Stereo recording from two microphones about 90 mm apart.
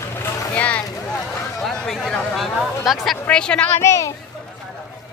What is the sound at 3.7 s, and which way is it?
Speech, 30° left (ahead or behind).